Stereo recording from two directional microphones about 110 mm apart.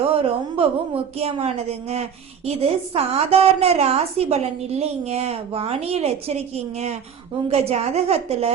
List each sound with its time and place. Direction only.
0.1 s a woman's voice: 60° right (ahead or behind)